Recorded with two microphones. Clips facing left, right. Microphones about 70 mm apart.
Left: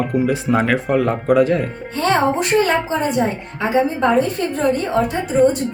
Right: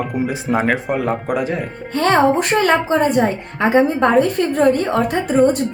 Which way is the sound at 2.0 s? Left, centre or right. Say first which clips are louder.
Right 3 dB; right.